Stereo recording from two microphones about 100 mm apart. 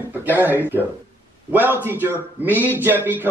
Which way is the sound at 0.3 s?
20° right (ahead or behind).